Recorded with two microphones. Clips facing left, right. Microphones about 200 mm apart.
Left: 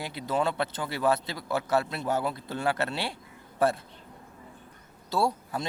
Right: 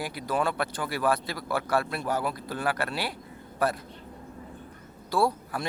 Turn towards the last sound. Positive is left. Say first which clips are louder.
# right 2 dB
turn(degrees=25)  # may be behind; listen again after turning